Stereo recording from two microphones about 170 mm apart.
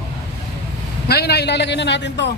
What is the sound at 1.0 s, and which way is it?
A man's voice, 70° left (ahead or behind).